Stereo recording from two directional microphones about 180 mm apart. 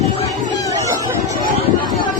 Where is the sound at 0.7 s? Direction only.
20° right (ahead or behind).